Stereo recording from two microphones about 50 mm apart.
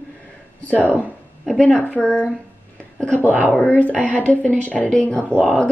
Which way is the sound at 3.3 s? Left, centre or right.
Right.